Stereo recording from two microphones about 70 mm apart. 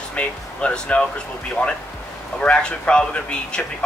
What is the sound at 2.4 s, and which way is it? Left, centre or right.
Speech, centre.